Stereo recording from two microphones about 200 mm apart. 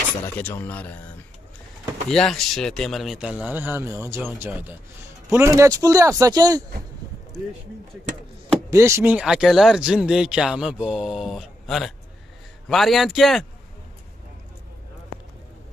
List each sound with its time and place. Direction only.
0.4 s speech: 10° left (ahead or behind)
2.0 s speech: centre (ahead or behind); by 6.6 s 20° right (ahead or behind)
8.6 s speech: 15° right (ahead or behind)